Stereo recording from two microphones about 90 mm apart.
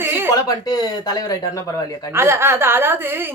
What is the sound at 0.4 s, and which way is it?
Speech, 45° left (ahead or behind).